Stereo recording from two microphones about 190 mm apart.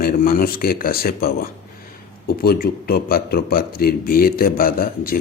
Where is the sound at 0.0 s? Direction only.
50° left (ahead or behind).